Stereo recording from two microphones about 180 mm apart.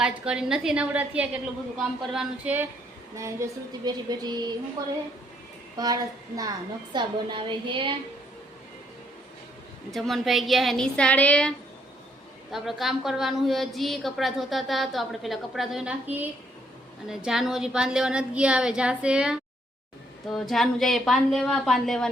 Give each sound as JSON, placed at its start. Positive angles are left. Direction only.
{"t": 0.0, "sound": "a woman's voice", "side_deg": -5}
{"t": 5.7, "sound": "speech", "side_deg": -20}
{"t": 9.9, "sound": "a woman's voice", "side_deg": 0}